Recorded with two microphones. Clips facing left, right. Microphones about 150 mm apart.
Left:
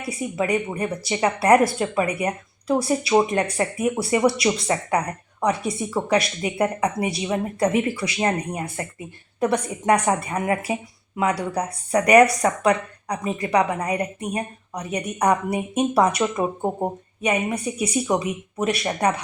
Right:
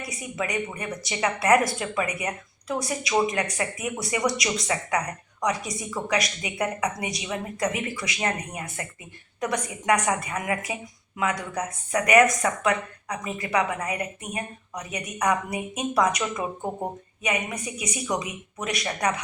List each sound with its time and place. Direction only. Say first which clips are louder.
0.0 s a woman's voice: left 6 dB; 30° left (ahead or behind)